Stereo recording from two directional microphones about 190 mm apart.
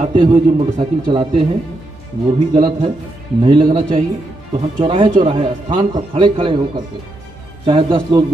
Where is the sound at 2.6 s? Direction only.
25° right (ahead or behind).